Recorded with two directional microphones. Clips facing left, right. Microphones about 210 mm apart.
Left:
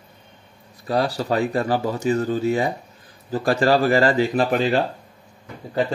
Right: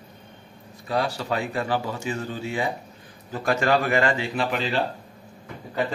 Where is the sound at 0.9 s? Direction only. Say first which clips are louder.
Left 4 dB; 40° left (ahead or behind).